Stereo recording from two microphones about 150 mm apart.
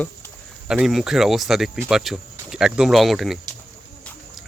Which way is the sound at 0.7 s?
5° right (ahead or behind).